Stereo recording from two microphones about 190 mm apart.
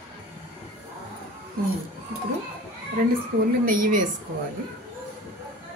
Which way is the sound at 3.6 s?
45° right (ahead or behind).